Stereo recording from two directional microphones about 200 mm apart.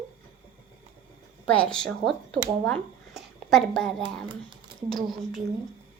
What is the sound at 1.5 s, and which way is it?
Speech, 5° left (ahead or behind).